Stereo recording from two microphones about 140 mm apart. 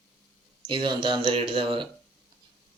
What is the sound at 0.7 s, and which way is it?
Speech, 35° right (ahead or behind).